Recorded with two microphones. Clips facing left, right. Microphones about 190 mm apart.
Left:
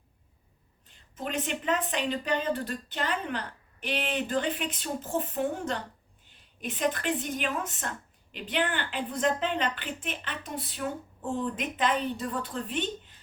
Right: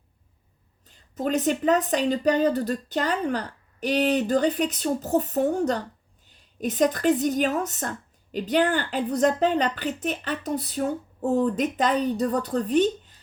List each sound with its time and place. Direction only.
1.1 s a woman's voice: 40° right (ahead or behind)